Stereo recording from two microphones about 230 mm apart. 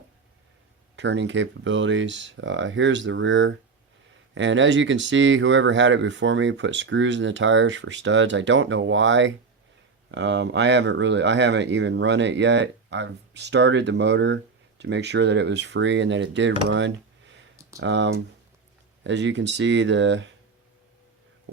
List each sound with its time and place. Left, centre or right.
0.9 s speech: right